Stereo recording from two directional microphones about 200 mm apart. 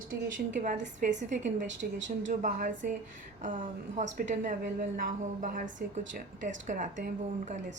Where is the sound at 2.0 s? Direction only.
40° right (ahead or behind).